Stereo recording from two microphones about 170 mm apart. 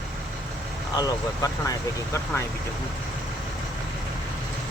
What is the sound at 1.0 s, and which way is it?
Speech, 20° left (ahead or behind).